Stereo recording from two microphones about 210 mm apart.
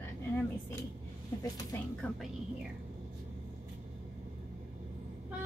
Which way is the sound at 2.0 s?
5° left (ahead or behind).